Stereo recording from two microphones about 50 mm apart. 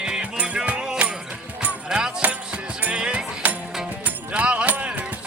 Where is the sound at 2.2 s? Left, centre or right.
Right.